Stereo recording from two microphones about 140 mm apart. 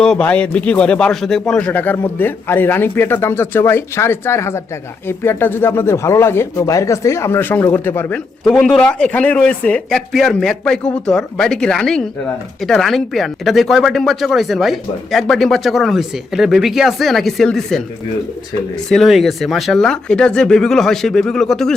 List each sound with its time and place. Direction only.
0.0 s speech: 5° left (ahead or behind)
8.4 s speech: 5° left (ahead or behind)
18.9 s speech: centre (ahead or behind)